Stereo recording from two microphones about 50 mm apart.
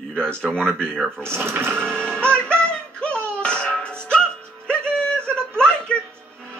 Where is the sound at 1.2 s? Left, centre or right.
Right.